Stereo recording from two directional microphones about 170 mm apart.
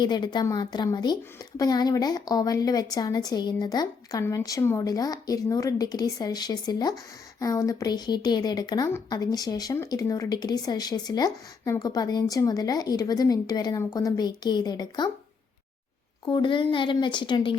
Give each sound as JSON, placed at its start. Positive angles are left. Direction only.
{"t": 0.0, "sound": "a woman's voice", "side_deg": 25}
{"t": 16.2, "sound": "a woman's voice", "side_deg": 30}